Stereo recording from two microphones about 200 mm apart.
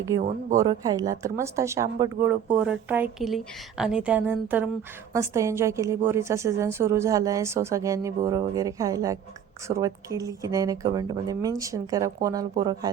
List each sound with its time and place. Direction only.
0.5 s a woman's voice: 15° right (ahead or behind)